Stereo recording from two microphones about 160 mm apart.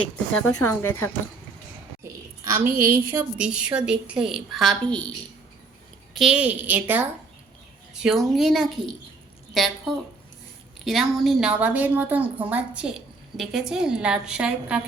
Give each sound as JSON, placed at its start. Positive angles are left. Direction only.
{"t": 0.0, "sound": "a woman's voice", "side_deg": 10}
{"t": 2.4, "sound": "a woman's voice", "side_deg": -20}
{"t": 6.1, "sound": "a woman's voice", "side_deg": -5}
{"t": 8.0, "sound": "a woman's voice", "side_deg": 0}
{"t": 10.8, "sound": "a woman's voice", "side_deg": 0}